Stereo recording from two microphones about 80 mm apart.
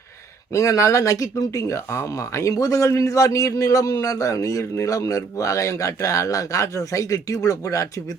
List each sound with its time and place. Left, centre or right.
0.5 s speech: left